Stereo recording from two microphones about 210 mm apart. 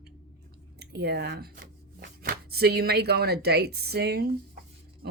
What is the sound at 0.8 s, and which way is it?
Speech, 50° right (ahead or behind).